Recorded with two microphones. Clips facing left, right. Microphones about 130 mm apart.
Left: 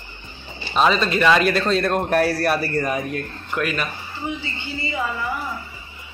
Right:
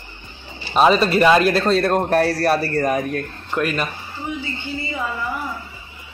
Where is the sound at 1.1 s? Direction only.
35° right (ahead or behind).